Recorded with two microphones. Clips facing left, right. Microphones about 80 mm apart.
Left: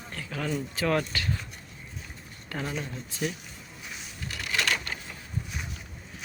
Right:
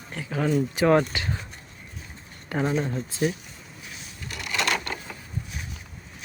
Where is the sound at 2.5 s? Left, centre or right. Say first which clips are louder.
Right 8 dB; right.